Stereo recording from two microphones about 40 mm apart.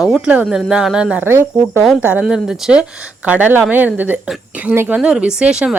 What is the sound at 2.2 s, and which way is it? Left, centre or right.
Speech, centre.